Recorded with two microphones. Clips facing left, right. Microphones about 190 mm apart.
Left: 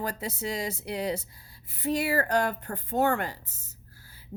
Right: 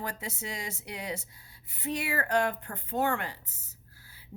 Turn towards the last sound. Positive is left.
turn(degrees=40)  # may be behind; listen again after turning